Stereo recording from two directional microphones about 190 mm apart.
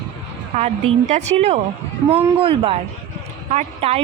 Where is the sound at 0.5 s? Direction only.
35° right (ahead or behind).